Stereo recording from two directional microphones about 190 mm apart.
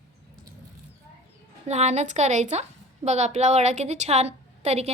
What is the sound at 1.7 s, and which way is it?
A woman's voice, 35° right (ahead or behind).